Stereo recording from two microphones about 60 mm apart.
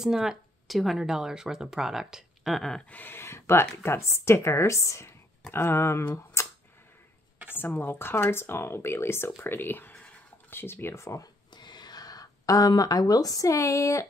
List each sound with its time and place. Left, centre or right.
0.0 s a sound: centre
0.7 s speech: centre
2.9 s speech: left
3.2 s speech: left
6.4 s a sound: left
7.5 s speech: left
12.0 s speech: left